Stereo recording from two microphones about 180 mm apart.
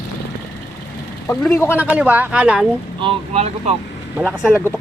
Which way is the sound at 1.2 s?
10° left (ahead or behind).